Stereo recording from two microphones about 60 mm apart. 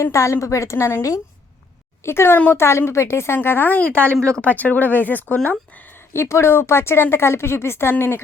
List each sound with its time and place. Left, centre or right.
0.0 s a woman's voice: left
2.0 s speech: left
3.8 s speech: left
6.1 s speech: left